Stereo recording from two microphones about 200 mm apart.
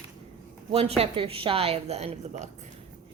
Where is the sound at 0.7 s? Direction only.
30° right (ahead or behind).